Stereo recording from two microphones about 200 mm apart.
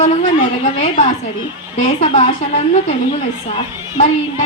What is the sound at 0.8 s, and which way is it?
Speech, 40° left (ahead or behind).